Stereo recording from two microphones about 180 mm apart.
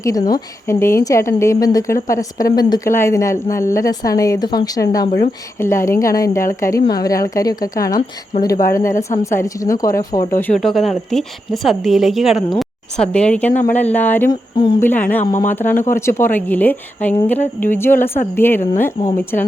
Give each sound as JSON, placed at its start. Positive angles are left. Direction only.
{"t": 0.0, "sound": "a woman's voice", "side_deg": 20}
{"t": 7.9, "sound": "speech", "side_deg": 50}
{"t": 8.7, "sound": "a woman's voice", "side_deg": 15}
{"t": 10.4, "sound": "a woman's voice", "side_deg": 5}